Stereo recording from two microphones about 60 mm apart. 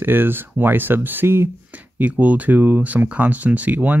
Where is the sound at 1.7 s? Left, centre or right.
Right.